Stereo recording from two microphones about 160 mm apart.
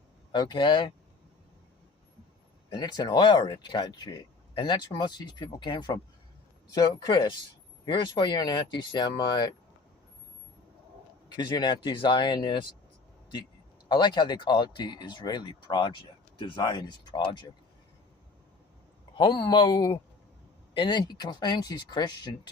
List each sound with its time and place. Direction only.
0.3 s speech: 30° left (ahead or behind)
2.6 s speech: 25° left (ahead or behind)
11.3 s speech: 25° left (ahead or behind)
13.8 s speech: 25° left (ahead or behind)
19.1 s speech: 30° left (ahead or behind)